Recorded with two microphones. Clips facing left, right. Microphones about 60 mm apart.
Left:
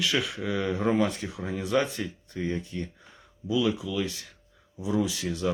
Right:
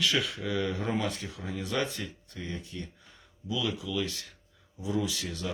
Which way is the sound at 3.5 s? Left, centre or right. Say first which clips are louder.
Left 6 dB; centre.